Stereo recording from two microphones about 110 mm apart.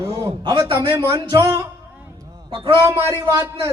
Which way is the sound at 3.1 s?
30° right (ahead or behind).